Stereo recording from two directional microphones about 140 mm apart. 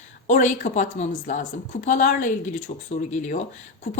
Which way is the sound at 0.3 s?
60° left (ahead or behind).